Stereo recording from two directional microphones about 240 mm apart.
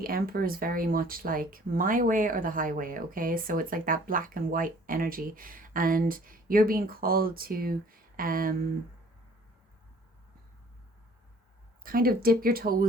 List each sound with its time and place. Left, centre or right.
0.0 s speech: right
11.8 s speech: right